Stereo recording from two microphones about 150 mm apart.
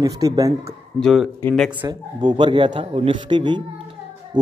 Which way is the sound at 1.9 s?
30° right (ahead or behind).